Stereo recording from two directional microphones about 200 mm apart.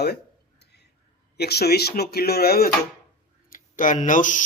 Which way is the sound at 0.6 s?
55° left (ahead or behind).